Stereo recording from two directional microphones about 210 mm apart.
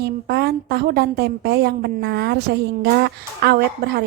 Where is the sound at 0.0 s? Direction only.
50° right (ahead or behind).